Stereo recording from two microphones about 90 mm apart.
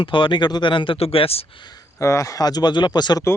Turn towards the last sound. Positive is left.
turn(degrees=50)  # may be behind; listen again after turning